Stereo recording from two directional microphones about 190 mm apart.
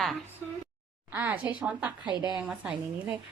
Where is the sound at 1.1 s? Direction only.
10° right (ahead or behind).